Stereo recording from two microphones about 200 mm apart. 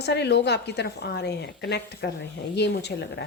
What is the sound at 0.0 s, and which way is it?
A woman's voice, 55° left (ahead or behind).